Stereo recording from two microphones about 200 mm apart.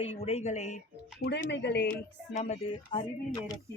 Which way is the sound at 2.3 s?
35° left (ahead or behind).